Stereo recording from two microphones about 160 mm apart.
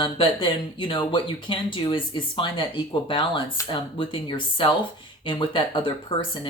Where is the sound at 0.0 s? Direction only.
30° left (ahead or behind).